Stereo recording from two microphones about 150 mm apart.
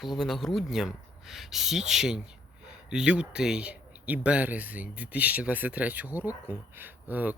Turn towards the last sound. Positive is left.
turn(degrees=-10)  # may be behind; listen again after turning